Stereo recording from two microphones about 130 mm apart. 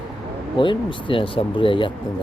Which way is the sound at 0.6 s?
40° left (ahead or behind).